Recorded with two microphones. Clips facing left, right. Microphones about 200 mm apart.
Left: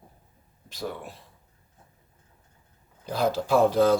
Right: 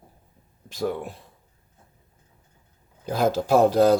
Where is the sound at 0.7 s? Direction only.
50° right (ahead or behind).